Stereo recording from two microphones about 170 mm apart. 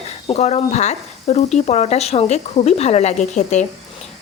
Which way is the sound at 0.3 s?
40° left (ahead or behind).